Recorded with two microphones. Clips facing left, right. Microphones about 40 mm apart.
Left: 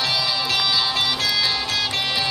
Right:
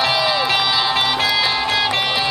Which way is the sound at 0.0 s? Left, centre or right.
Right.